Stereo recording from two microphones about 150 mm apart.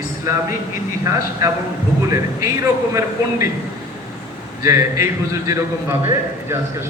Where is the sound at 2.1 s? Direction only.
20° right (ahead or behind).